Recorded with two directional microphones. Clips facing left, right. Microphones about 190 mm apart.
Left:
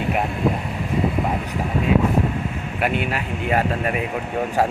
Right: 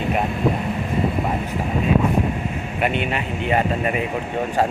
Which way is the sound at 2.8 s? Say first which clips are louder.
Even; 5° left (ahead or behind).